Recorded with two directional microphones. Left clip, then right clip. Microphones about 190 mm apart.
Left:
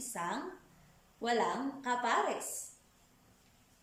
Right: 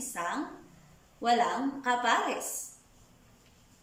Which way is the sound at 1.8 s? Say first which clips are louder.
Right 4 dB; 25° left (ahead or behind).